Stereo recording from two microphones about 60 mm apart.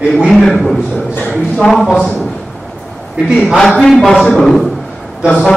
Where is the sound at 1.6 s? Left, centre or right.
Centre.